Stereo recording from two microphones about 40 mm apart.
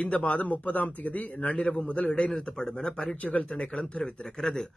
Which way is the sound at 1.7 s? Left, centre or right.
Left.